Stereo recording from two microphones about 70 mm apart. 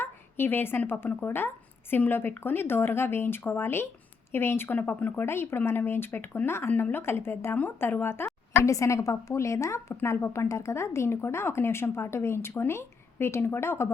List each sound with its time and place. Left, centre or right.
0.0 s a woman's voice: left